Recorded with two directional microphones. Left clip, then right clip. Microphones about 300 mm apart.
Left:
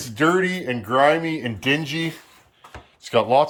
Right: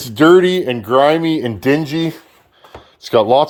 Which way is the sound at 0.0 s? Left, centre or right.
Right.